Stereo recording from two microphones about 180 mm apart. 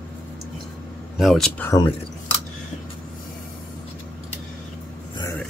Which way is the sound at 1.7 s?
25° left (ahead or behind).